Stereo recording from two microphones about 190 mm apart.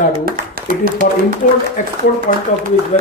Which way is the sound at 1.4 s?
45° left (ahead or behind).